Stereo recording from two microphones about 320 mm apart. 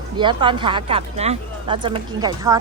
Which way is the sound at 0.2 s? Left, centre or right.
Centre.